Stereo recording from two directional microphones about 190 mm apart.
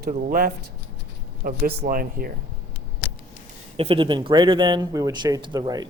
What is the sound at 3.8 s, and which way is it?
Speech, 30° right (ahead or behind).